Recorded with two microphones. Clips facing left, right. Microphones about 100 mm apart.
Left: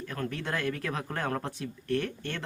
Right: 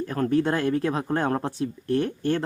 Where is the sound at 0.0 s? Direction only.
35° right (ahead or behind).